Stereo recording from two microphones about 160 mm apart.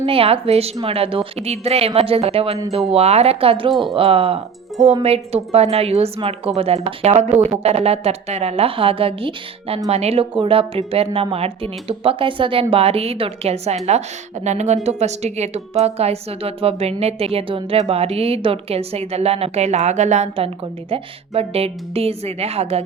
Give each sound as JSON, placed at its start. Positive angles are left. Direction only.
{"t": 0.0, "sound": "a woman's voice", "side_deg": -35}